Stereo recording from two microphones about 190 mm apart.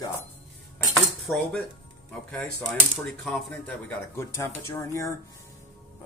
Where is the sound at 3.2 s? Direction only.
5° left (ahead or behind).